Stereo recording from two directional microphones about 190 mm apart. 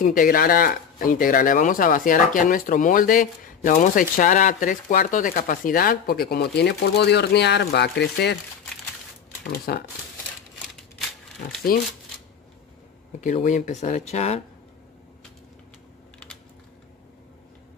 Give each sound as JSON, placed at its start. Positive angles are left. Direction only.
{"t": 0.0, "sound": "speech", "side_deg": 45}
{"t": 9.5, "sound": "speech", "side_deg": 55}
{"t": 11.7, "sound": "speech", "side_deg": 50}
{"t": 13.2, "sound": "speech", "side_deg": 40}